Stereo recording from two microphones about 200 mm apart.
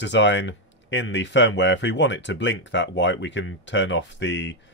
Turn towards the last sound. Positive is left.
turn(degrees=60)  # may be behind; listen again after turning